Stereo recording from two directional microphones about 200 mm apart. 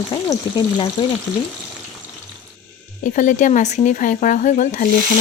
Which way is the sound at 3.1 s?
40° left (ahead or behind).